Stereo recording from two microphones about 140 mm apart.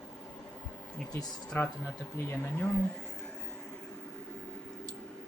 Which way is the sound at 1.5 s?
15° left (ahead or behind).